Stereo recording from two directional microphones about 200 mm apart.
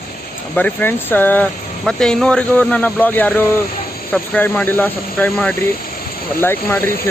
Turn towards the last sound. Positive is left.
turn(degrees=10)  # may be behind; listen again after turning